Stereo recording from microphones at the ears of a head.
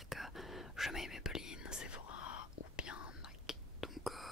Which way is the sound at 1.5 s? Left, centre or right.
Left.